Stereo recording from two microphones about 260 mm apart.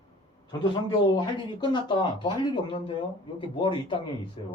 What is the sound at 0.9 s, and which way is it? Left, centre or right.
Speech, centre.